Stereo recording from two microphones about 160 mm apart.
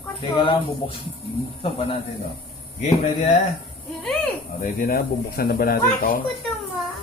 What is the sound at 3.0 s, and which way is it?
Speech, 45° left (ahead or behind).